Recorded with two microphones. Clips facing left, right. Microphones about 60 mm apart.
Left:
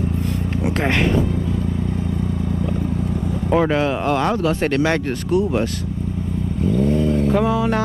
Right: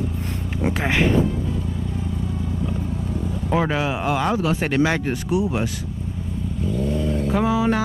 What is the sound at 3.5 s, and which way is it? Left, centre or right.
Speech, centre.